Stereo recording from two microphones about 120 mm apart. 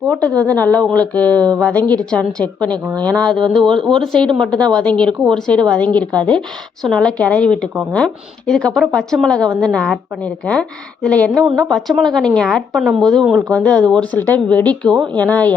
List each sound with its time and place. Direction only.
0.1 s a woman's voice: 10° left (ahead or behind)
4.3 s a woman's voice: 40° right (ahead or behind)
4.6 s a woman's voice: 10° left (ahead or behind)